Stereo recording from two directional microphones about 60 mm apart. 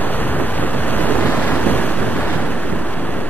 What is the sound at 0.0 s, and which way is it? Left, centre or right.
Waves, left.